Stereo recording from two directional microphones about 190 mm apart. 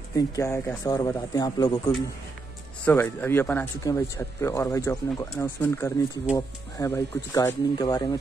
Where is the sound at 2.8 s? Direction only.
10° left (ahead or behind).